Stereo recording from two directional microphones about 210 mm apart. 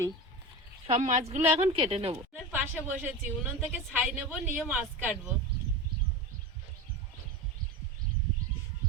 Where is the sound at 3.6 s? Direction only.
5° right (ahead or behind).